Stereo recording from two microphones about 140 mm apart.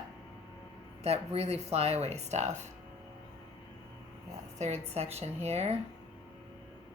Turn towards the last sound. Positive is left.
turn(degrees=-50)  # may be behind; listen again after turning